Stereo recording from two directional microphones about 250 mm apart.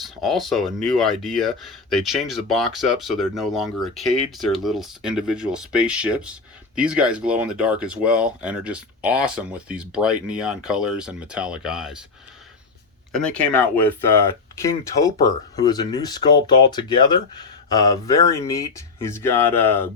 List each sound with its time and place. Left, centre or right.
0.0 s speech: centre
13.1 s speech: centre